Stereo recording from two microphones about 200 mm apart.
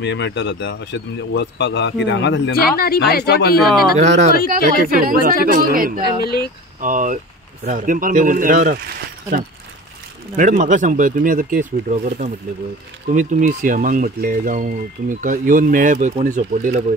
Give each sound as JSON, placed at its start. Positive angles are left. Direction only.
{"t": 0.0, "sound": "speech", "side_deg": 60}
{"t": 4.0, "sound": "speech", "side_deg": -35}
{"t": 6.2, "sound": "speech", "side_deg": 50}
{"t": 6.8, "sound": "speech", "side_deg": -40}
{"t": 10.3, "sound": "speech", "side_deg": -40}